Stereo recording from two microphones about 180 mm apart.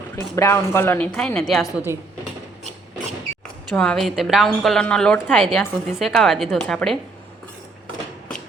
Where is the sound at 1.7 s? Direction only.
15° right (ahead or behind).